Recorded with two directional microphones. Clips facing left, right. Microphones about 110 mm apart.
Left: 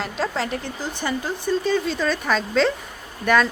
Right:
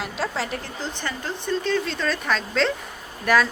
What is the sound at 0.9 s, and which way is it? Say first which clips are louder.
Speech: left 7 dB; 10° left (ahead or behind).